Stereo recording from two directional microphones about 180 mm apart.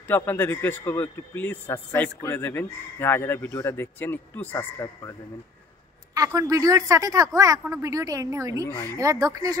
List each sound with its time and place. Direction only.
0.0 s a man's voice: 10° left (ahead or behind)
6.1 s speech: 20° right (ahead or behind)